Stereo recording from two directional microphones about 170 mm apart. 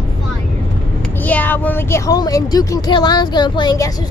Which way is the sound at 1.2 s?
10° left (ahead or behind).